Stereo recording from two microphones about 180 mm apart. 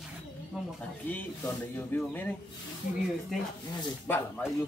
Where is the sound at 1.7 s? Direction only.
10° left (ahead or behind).